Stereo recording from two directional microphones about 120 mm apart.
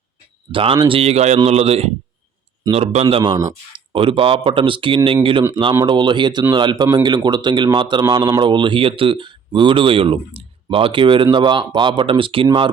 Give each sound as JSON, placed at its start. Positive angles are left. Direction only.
{"t": 0.5, "sound": "a man's voice", "side_deg": -45}